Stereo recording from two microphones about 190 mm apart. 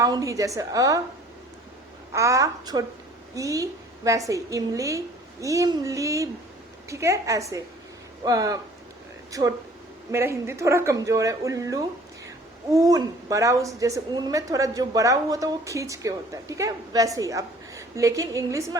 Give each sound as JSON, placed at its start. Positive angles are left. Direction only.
{"t": 0.0, "sound": "speech", "side_deg": -20}
{"t": 2.1, "sound": "a woman's voice", "side_deg": -15}